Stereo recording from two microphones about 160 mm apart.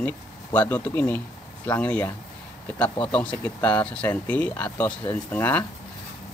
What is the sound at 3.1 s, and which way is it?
Speech, 10° left (ahead or behind).